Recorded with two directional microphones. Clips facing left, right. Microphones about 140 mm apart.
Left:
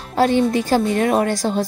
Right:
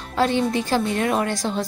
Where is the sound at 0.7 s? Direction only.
45° left (ahead or behind).